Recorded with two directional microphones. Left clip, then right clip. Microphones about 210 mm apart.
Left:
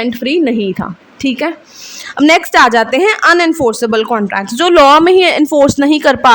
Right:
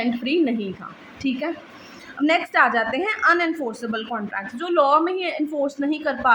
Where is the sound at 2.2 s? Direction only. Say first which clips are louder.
Left 11 dB; 55° left (ahead or behind).